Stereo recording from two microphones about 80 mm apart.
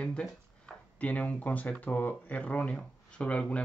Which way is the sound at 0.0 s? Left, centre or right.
Centre.